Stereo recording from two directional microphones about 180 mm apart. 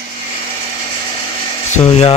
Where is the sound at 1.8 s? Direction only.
35° left (ahead or behind).